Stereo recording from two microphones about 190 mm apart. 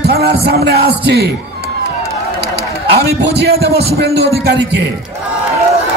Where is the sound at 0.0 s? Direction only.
55° right (ahead or behind).